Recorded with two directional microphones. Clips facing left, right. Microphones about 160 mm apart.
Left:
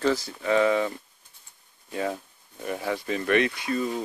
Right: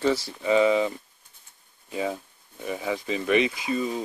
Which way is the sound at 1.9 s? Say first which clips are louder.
Even; 5° right (ahead or behind).